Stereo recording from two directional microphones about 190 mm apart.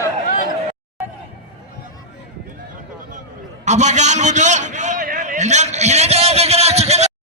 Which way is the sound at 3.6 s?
40° right (ahead or behind).